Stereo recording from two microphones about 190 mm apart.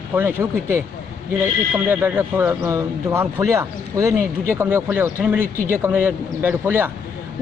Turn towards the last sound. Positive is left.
turn(degrees=-10)  # may be behind; listen again after turning